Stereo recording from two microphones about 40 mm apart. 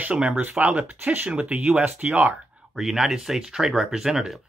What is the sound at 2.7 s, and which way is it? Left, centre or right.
Speech, centre.